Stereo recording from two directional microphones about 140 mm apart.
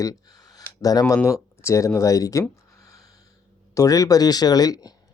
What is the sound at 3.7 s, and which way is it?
Speech, 25° left (ahead or behind).